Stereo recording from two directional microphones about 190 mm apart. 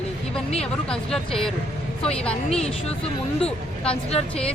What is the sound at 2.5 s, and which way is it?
Speech, 30° left (ahead or behind).